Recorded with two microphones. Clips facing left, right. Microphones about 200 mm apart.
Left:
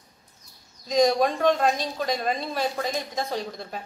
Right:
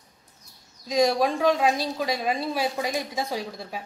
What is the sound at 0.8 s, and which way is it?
Speech, 5° right (ahead or behind).